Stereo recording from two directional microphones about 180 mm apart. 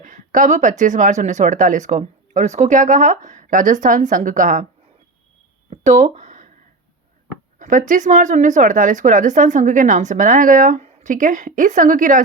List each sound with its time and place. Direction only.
0.0 s speech: 45° right (ahead or behind)
5.7 s a sound: 40° right (ahead or behind)
7.6 s speech: 45° right (ahead or behind)